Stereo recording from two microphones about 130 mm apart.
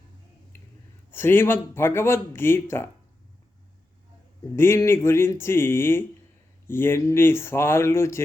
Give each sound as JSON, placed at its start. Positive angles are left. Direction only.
{"t": 0.5, "sound": "a sound", "side_deg": 20}
{"t": 1.1, "sound": "speech", "side_deg": 15}
{"t": 4.5, "sound": "speech", "side_deg": 20}